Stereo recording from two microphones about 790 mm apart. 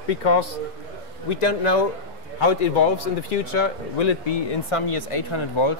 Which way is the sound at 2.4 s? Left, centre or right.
Left.